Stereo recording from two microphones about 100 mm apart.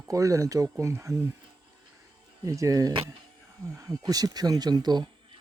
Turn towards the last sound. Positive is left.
turn(degrees=-45)  # may be behind; listen again after turning